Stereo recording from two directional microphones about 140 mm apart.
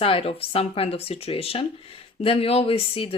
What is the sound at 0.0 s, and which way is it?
Speech, 40° left (ahead or behind).